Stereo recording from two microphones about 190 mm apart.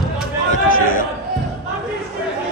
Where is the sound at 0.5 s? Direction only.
45° left (ahead or behind).